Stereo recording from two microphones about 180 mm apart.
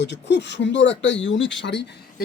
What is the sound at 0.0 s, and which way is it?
Speech, 70° left (ahead or behind).